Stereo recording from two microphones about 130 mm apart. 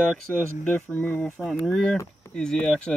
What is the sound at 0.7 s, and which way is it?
Speech, 15° left (ahead or behind).